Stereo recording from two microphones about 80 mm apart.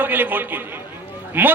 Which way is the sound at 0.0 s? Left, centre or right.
Right.